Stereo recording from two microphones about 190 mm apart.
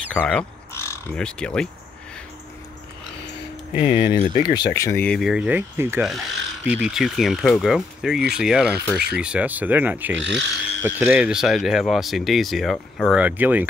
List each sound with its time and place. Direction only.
0.1 s speech: 5° left (ahead or behind)
3.8 s speech: 25° left (ahead or behind)
4.3 s speech: 40° left (ahead or behind)
4.7 s speech: 15° left (ahead or behind); by 10.1 s 10° right (ahead or behind)
10.1 s speech: 70° right (ahead or behind)
10.8 s speech: 10° right (ahead or behind)